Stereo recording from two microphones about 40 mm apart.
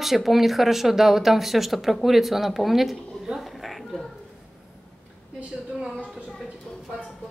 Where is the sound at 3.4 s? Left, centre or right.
Centre.